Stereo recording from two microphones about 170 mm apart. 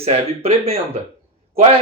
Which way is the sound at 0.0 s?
35° right (ahead or behind).